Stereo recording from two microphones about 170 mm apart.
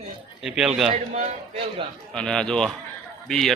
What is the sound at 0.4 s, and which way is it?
Speech, 5° right (ahead or behind).